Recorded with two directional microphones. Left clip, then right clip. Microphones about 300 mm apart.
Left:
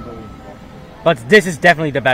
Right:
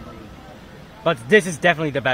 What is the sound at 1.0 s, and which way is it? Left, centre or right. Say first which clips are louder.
Speech: left 5 dB; centre.